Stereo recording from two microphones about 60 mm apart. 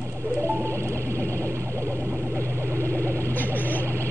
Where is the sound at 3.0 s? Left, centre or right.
Right.